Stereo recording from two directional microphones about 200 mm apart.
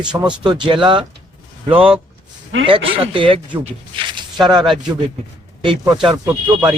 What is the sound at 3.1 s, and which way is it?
Speech, 25° right (ahead or behind).